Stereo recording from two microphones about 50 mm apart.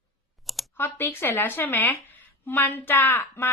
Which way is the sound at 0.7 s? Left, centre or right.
Left.